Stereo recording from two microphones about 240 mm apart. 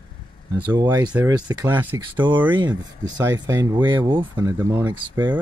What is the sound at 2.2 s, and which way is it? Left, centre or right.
Speech, centre.